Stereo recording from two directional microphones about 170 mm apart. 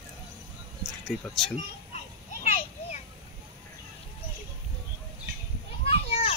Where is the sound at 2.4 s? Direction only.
40° left (ahead or behind).